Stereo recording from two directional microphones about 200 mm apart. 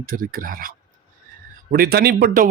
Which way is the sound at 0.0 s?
45° right (ahead or behind).